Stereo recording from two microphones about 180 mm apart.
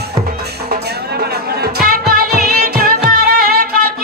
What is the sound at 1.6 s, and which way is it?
Music, 55° right (ahead or behind).